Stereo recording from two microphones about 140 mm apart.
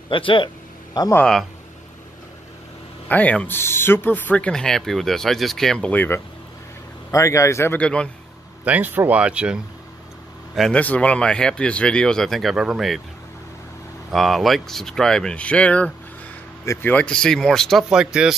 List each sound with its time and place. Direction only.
0.1 s speech: 35° left (ahead or behind)
1.1 s speech: 5° left (ahead or behind)
3.1 s a man's voice: 10° left (ahead or behind)
7.8 s speech: 5° left (ahead or behind)
8.6 s speech: 10° right (ahead or behind)
14.1 s speech: centre (ahead or behind)